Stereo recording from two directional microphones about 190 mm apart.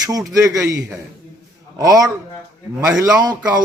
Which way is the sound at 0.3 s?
15° right (ahead or behind).